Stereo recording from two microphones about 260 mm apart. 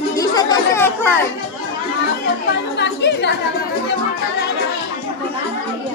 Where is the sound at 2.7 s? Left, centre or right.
Left.